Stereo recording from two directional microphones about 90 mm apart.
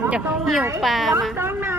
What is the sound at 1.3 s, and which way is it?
Speech, 25° right (ahead or behind).